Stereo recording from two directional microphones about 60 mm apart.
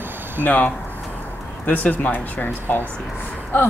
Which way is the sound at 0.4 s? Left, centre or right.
Left.